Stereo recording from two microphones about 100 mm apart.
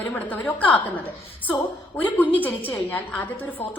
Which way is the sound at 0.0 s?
15° left (ahead or behind).